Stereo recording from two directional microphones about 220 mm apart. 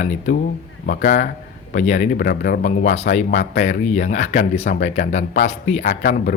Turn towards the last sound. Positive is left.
turn(degrees=35)  # may be behind; listen again after turning